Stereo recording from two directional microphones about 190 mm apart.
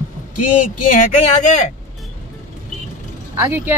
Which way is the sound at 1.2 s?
35° left (ahead or behind).